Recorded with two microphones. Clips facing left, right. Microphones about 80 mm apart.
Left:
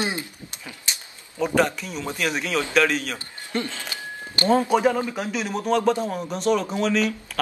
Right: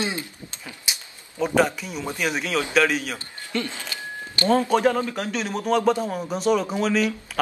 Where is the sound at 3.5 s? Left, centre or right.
Left.